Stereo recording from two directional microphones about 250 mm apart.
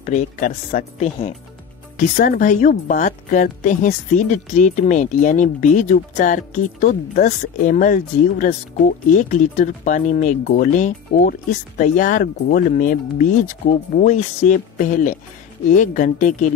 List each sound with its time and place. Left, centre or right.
0.0 s speech: left